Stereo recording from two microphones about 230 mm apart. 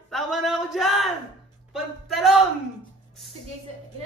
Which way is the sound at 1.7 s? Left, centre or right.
Centre.